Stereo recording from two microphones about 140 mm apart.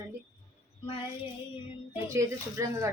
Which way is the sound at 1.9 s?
20° right (ahead or behind).